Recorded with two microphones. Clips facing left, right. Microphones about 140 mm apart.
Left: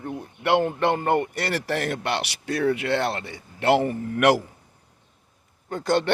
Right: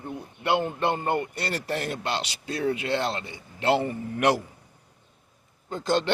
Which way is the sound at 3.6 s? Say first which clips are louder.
Left 3 dB; 80° left.